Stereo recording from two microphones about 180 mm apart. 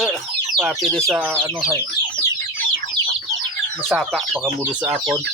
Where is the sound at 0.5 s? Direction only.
Centre (ahead or behind).